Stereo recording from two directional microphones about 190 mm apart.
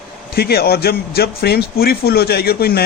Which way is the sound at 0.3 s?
55° left (ahead or behind).